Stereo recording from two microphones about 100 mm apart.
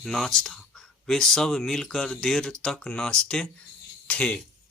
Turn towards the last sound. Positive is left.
turn(degrees=10)  # may be behind; listen again after turning